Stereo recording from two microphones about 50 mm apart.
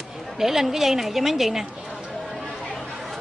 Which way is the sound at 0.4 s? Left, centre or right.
Centre.